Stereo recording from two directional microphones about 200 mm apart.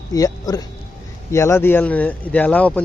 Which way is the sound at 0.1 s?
20° left (ahead or behind).